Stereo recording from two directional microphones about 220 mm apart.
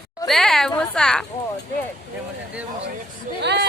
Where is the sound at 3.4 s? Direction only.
50° right (ahead or behind).